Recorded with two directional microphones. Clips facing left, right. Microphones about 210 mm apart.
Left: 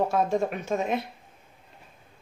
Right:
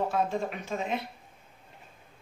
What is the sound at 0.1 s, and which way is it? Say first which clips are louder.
Speech: left 4 dB; 45° left (ahead or behind).